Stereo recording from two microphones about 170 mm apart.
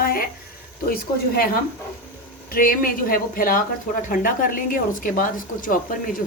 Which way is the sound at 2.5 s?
55° left (ahead or behind).